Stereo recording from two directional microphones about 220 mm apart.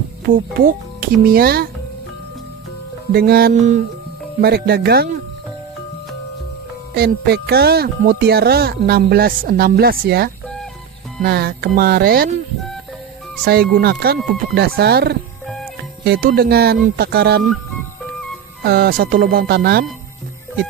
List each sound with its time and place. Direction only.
0.5 s speech: 40° right (ahead or behind)
3.1 s speech: 45° right (ahead or behind)
6.9 s speech: 45° right (ahead or behind)
13.4 s speech: 45° right (ahead or behind)
15.4 s music: centre (ahead or behind)
16.0 s speech: 45° right (ahead or behind)
18.6 s speech: 45° right (ahead or behind)